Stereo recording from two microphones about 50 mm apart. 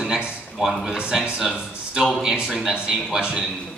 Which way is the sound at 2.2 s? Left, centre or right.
Centre.